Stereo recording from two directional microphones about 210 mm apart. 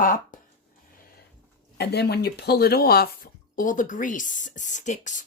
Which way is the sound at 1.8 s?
50° left (ahead or behind).